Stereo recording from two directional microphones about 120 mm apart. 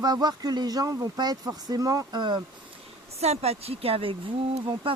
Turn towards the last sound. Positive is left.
turn(degrees=-50)  # may be behind; listen again after turning